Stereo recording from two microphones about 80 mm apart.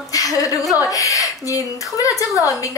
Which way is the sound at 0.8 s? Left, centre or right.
Left.